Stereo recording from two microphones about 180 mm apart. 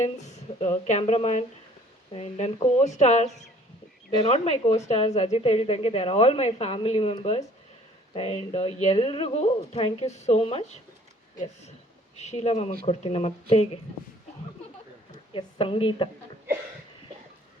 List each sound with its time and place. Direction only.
0.0 s a woman's voice: 40° left (ahead or behind)
12.2 s a woman's voice: 35° left (ahead or behind)
15.3 s a woman's voice: 30° left (ahead or behind)